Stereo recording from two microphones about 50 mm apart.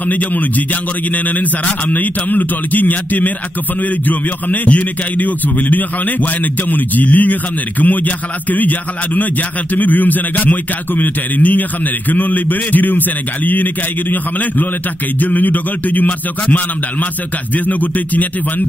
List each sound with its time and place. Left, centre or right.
0.1 s speech: left
17.6 s speech: left